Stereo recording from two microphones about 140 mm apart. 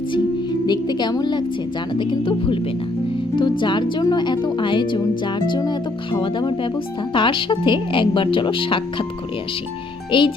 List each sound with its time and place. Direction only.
0.7 s a woman's voice: 30° left (ahead or behind)
3.6 s a woman's voice: 35° left (ahead or behind)
10.1 s a child's voice: 35° left (ahead or behind)